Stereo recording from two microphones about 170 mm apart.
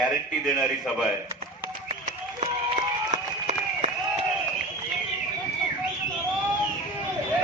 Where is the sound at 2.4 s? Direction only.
40° right (ahead or behind).